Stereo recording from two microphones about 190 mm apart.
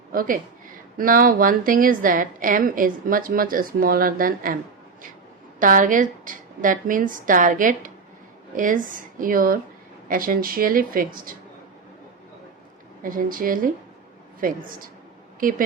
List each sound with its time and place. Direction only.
0.1 s a woman's voice: 50° right (ahead or behind)
5.5 s a woman's voice: 45° right (ahead or behind)
13.0 s a woman's voice: 45° right (ahead or behind)